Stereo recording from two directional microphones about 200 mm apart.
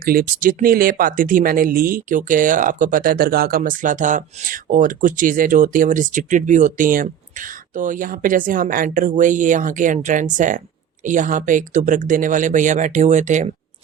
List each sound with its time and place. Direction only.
0.0 s speech: 45° right (ahead or behind)